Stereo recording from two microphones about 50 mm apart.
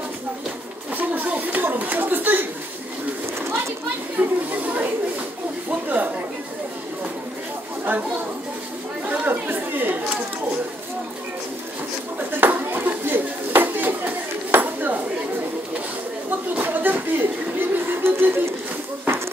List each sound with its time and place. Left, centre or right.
0.9 s a sound: right
3.4 s pigeon: right
4.2 s a sound: right
5.7 s chatter: right
9.2 s chatter: right
12.3 s dishes: right
16.3 s chuckle: right